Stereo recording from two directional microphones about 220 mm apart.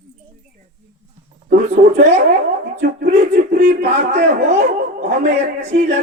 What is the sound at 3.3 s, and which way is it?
Speech, 40° right (ahead or behind).